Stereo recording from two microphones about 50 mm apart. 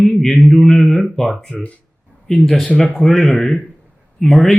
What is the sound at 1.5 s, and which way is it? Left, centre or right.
Speech, left.